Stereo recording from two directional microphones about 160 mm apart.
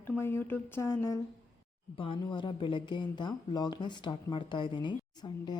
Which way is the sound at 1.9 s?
35° left (ahead or behind).